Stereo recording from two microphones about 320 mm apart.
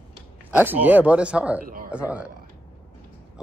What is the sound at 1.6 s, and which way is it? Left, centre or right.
Speech, right.